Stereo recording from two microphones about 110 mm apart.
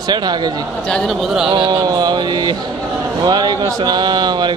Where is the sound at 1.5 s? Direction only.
45° right (ahead or behind).